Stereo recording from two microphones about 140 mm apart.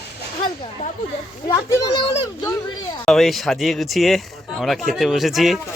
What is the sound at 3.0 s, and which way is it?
Speech, centre (ahead or behind).